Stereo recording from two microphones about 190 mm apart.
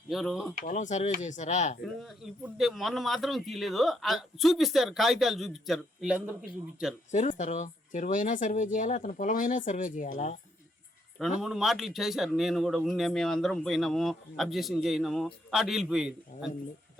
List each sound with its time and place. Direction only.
0.1 s speech: centre (ahead or behind)
0.6 s speech: 40° left (ahead or behind)
2.0 s speech: centre (ahead or behind)
7.1 s speech: 40° left (ahead or behind)
11.2 s speech: 5° right (ahead or behind)